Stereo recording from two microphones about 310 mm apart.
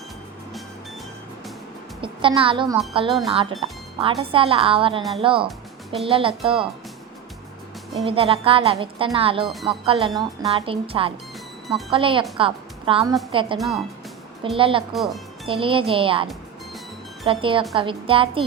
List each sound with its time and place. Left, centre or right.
2.0 s a woman's voice: centre
3.1 s speech: centre
3.6 s speech: centre
5.5 s music: centre
6.1 s speech: centre
8.0 s speech: centre
9.5 s speech: centre
9.8 s a woman's voice: centre
13.6 s speech: centre
14.5 s speech: centre
14.9 s speech: centre
15.4 s speech: centre